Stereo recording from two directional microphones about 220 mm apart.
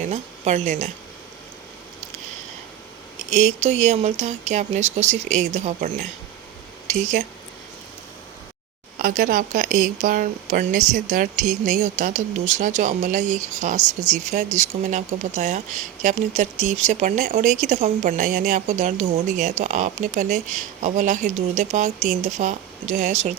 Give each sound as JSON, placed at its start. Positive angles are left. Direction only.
{"t": 0.0, "sound": "speech", "side_deg": -30}
{"t": 3.2, "sound": "speech", "side_deg": -30}
{"t": 9.0, "sound": "speech", "side_deg": -40}